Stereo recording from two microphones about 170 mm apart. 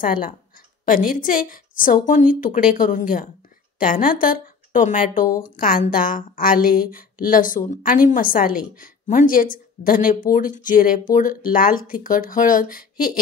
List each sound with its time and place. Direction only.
0.0 s speech: 55° left (ahead or behind)